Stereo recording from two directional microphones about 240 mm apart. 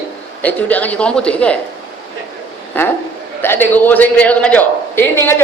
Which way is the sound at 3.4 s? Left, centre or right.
Centre.